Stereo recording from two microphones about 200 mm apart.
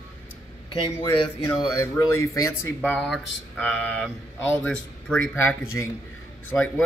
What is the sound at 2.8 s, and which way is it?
Mantra, 5° left (ahead or behind).